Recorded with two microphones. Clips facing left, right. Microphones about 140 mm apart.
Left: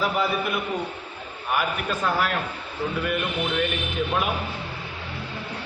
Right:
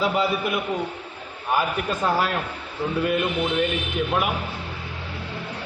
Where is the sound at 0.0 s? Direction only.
20° right (ahead or behind).